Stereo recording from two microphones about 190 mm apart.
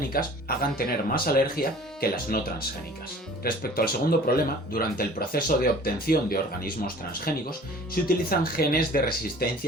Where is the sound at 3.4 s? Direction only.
50° left (ahead or behind).